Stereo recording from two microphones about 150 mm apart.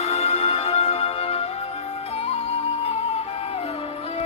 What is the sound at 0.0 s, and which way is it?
Music, 45° left (ahead or behind).